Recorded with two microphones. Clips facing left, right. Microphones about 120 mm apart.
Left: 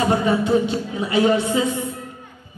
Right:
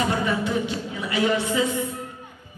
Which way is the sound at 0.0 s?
20° left (ahead or behind).